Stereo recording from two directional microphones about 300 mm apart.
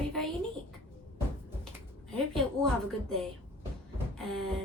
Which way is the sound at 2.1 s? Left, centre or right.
Centre.